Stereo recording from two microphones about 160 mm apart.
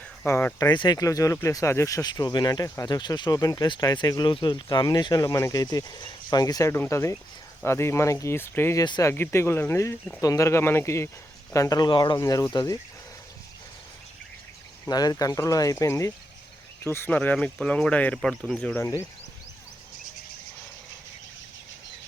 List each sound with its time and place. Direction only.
0.3 s speech: 15° left (ahead or behind)
0.7 s speech: 30° left (ahead or behind)
14.8 s speech: 25° left (ahead or behind); by 18.9 s 10° left (ahead or behind)